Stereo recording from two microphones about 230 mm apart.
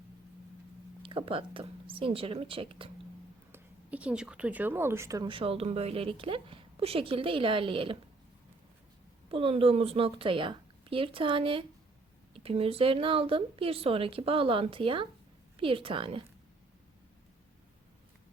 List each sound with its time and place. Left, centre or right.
1.0 s a woman's voice: right
3.5 s a woman's voice: centre; by 7.9 s right
9.3 s a woman's voice: right